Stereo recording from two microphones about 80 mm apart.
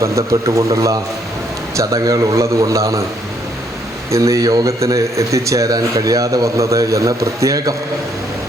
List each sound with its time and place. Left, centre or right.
0.0 s a man's voice: right
4.1 s a man's voice: right